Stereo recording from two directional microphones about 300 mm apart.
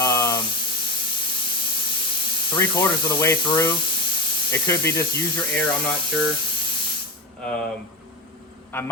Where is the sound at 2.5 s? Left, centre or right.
Centre.